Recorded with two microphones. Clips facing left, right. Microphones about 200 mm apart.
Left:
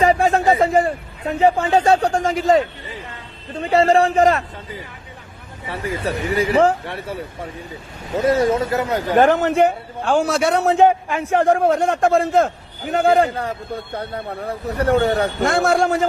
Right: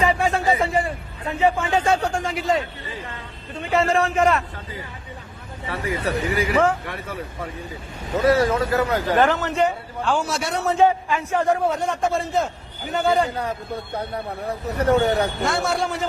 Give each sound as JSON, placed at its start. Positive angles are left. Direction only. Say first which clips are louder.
{"t": 0.0, "sound": "a man's voice", "louder": "left 5 dB", "side_deg": 40}
{"t": 5.6, "sound": "a man's voice", "louder": "left 1 dB", "side_deg": 25}
{"t": 8.2, "sound": "a man's voice", "louder": "left 2 dB", "side_deg": 20}
{"t": 9.1, "sound": "a man's voice", "louder": "left 7 dB", "side_deg": 50}
{"t": 13.3, "sound": "a man's voice", "louder": "left 1 dB", "side_deg": 30}
{"t": 15.4, "sound": "a man's voice", "louder": "left 6 dB", "side_deg": 50}